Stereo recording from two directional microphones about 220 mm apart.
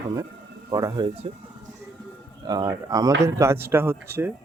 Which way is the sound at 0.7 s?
20° right (ahead or behind).